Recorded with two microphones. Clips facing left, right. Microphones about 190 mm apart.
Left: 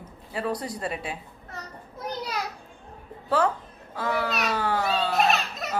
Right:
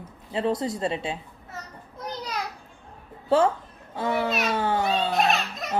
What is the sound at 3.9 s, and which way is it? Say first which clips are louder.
Speech: right 2 dB; 25° right (ahead or behind).